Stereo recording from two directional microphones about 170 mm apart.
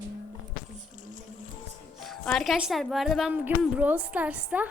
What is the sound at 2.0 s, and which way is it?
A woman's voice, centre (ahead or behind).